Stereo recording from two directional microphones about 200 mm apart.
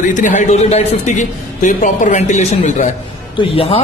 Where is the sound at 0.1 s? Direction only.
40° left (ahead or behind).